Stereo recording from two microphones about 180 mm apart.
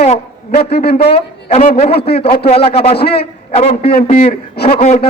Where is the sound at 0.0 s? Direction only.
35° left (ahead or behind).